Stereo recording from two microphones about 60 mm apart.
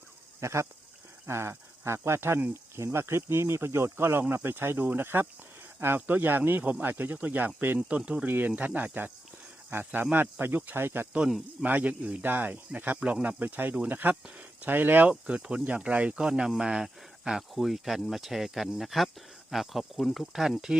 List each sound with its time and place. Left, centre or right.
0.3 s speech: right
7.9 s speech: centre
8.3 s speech: right
11.6 s speech: right
15.3 s speech: centre